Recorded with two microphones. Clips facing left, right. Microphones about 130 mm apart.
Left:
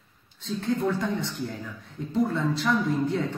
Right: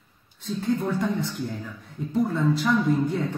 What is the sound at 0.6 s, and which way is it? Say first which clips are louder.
Speech: right 1 dB; 20° right (ahead or behind).